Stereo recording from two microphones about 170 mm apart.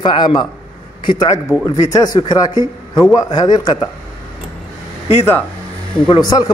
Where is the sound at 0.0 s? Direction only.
25° left (ahead or behind).